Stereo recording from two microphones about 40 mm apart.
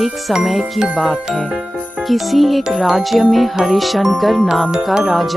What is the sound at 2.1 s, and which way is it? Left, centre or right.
Speech, centre.